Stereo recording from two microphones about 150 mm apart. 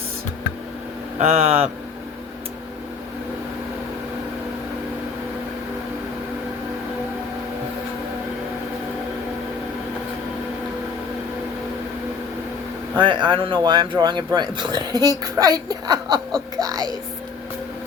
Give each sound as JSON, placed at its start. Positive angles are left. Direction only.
{"t": 1.2, "sound": "speech", "side_deg": -45}
{"t": 13.0, "sound": "speech", "side_deg": -30}
{"t": 16.6, "sound": "a sound", "side_deg": -25}